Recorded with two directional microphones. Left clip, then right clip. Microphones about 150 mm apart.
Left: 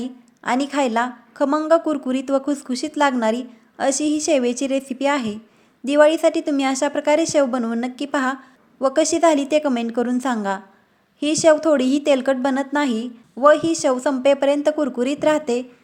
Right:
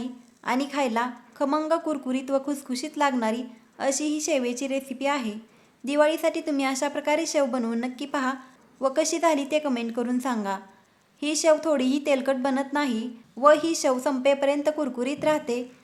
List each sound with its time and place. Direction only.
0.0 s a woman's voice: 30° left (ahead or behind)